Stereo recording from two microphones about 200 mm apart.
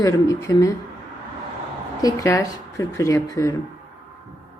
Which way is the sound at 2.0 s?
15° left (ahead or behind).